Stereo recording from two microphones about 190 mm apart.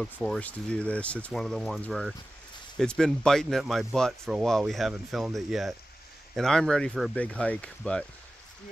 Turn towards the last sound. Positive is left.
turn(degrees=5)  # may be behind; listen again after turning